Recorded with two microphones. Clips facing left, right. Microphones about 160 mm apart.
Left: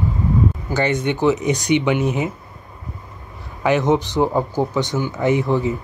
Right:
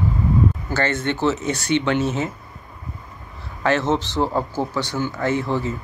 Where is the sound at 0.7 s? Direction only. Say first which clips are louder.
Left 3 dB; 15° left (ahead or behind).